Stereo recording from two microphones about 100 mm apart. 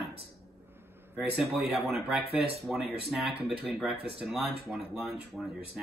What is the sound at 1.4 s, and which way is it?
Speech, centre (ahead or behind).